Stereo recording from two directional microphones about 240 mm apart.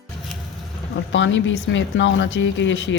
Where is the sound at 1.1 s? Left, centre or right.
Left.